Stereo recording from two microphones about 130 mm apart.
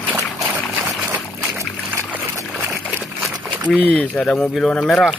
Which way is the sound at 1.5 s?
20° right (ahead or behind).